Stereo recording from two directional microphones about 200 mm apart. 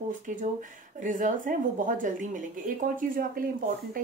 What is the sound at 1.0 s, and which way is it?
Speech, 40° right (ahead or behind).